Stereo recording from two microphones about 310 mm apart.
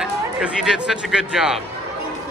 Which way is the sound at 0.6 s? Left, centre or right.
Centre.